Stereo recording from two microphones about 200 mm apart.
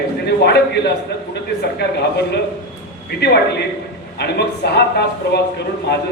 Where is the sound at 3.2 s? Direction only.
55° left (ahead or behind).